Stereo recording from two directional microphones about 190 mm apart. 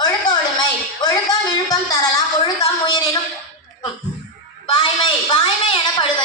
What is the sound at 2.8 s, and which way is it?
Speech, 25° left (ahead or behind).